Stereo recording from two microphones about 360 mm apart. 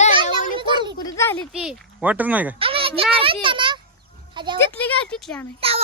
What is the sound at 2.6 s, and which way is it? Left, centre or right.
A child's voice, centre.